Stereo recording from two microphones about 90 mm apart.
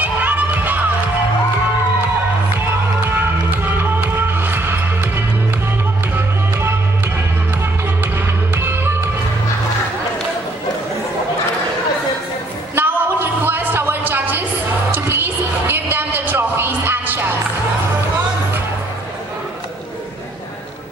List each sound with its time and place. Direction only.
0.0 s music: 20° right (ahead or behind)
3.6 s music: 25° right (ahead or behind)
8.5 s music: 25° right (ahead or behind)
12.7 s a sound: 25° right (ahead or behind)